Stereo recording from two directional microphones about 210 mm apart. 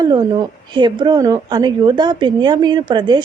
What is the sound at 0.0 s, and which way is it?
Speech, 20° right (ahead or behind).